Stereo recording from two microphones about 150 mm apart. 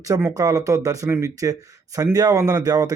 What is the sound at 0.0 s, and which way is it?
Speech, 20° right (ahead or behind).